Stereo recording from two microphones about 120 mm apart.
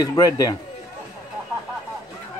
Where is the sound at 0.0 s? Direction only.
30° left (ahead or behind).